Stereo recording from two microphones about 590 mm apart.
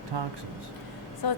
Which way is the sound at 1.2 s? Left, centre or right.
Left.